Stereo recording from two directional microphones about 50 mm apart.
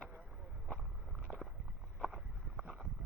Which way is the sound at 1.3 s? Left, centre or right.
Right.